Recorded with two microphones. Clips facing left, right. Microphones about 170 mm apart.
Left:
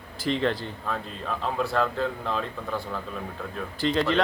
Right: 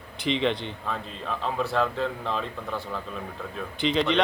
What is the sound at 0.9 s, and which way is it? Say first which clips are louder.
Speech: left 1 dB; centre (ahead or behind).